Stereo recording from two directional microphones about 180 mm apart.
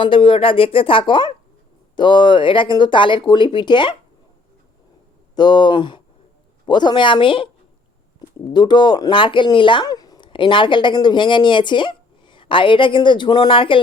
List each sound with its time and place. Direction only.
0.0 s speech: 30° left (ahead or behind)
5.3 s speech: 25° left (ahead or behind)
8.5 s speech: 25° left (ahead or behind)